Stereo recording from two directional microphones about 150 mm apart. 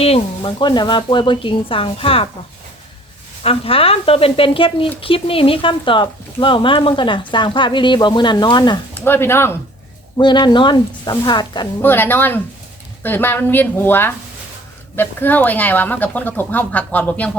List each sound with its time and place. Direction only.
0.0 s speech: 35° left (ahead or behind)
3.4 s speech: 40° left (ahead or behind)
9.0 s speech: 15° left (ahead or behind)
10.2 s speech: 30° left (ahead or behind)
11.8 s speech: 15° left (ahead or behind)